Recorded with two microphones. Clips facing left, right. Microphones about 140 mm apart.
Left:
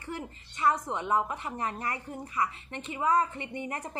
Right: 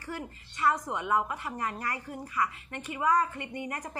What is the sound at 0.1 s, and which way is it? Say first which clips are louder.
A woman's voice: even; 25° left (ahead or behind).